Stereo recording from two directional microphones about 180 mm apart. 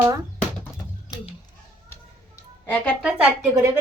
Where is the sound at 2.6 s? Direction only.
10° left (ahead or behind).